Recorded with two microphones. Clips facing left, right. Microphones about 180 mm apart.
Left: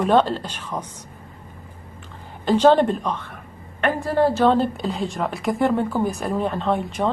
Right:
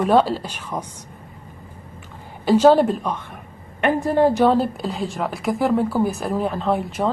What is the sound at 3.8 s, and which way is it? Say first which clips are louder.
Speech: right 2 dB; 20° right (ahead or behind).